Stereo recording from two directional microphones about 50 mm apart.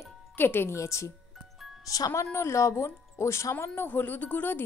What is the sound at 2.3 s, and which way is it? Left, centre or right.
Speech, left.